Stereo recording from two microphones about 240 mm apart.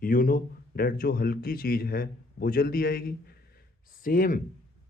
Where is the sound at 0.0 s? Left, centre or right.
Left.